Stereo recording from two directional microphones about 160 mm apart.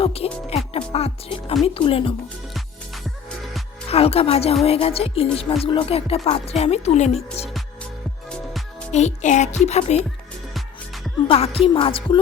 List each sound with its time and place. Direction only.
0.0 s speech: 40° left (ahead or behind)
3.8 s speech: 40° left (ahead or behind)
8.9 s speech: 45° left (ahead or behind)
10.5 s music: centre (ahead or behind)
11.3 s speech: 35° left (ahead or behind)